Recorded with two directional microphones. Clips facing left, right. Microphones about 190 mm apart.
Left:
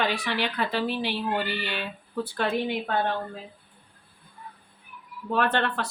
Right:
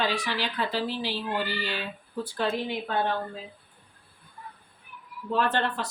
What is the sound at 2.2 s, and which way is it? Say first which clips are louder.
Speech: left 2 dB; 60° left (ahead or behind).